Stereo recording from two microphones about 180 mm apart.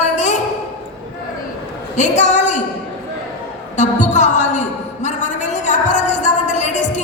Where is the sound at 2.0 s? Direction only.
40° left (ahead or behind).